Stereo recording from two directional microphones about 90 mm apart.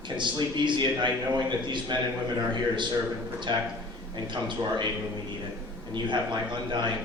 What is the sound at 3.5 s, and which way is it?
A man's voice, 50° right (ahead or behind).